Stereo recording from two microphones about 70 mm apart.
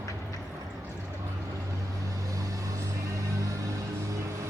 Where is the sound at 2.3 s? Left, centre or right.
Right.